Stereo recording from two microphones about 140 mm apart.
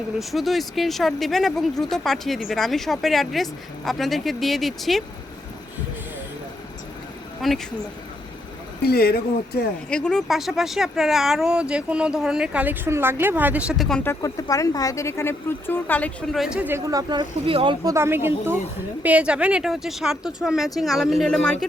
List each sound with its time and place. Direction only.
0.2 s speech: centre (ahead or behind)
7.4 s speech: centre (ahead or behind)
8.8 s a man's voice: 90° left
9.9 s speech: 5° left (ahead or behind)
14.0 s speech: 20° left (ahead or behind)
16.3 s speech: 5° right (ahead or behind)
16.9 s speech: 30° right (ahead or behind)
17.8 s speech: 20° right (ahead or behind); by 21.7 s 5° left (ahead or behind)